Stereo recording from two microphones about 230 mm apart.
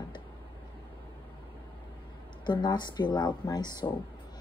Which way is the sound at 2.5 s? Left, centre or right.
Centre.